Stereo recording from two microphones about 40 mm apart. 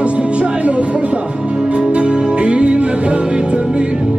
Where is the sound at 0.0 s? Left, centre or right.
Right.